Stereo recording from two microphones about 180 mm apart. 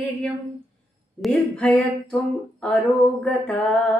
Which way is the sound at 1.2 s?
5° left (ahead or behind).